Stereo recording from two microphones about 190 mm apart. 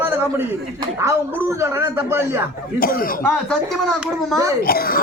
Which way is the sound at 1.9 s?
15° right (ahead or behind).